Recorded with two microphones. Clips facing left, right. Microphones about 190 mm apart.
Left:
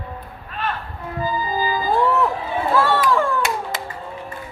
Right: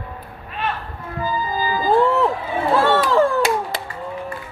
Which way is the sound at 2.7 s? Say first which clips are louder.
Right 2 dB; 30° right (ahead or behind).